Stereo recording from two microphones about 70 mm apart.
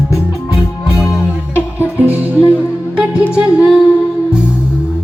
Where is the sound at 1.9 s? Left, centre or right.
Right.